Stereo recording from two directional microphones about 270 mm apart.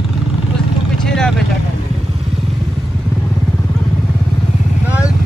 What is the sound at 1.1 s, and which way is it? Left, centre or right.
Vehicle, centre.